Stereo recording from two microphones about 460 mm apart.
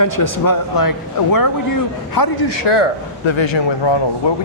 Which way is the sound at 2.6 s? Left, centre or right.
Left.